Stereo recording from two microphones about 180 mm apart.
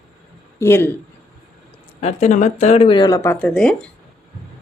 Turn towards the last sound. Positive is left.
turn(degrees=5)  # may be behind; listen again after turning